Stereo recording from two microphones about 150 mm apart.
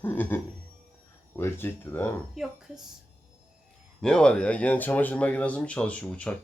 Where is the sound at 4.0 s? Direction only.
5° left (ahead or behind).